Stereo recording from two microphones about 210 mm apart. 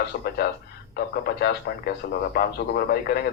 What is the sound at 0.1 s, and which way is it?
A man's voice, 45° left (ahead or behind).